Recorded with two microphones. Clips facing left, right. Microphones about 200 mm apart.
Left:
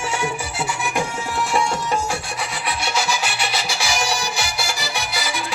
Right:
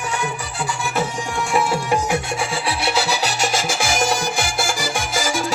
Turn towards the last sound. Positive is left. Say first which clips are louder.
# right 4 dB
turn(degrees=-45)  # may be behind; listen again after turning